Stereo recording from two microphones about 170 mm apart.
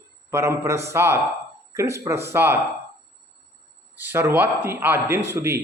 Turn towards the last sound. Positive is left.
turn(degrees=-15)  # may be behind; listen again after turning